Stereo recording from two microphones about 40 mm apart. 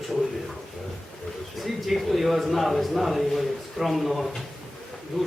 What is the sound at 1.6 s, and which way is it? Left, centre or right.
Speech, centre.